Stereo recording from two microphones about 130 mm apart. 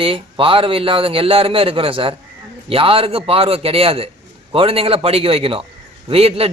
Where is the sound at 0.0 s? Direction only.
45° right (ahead or behind).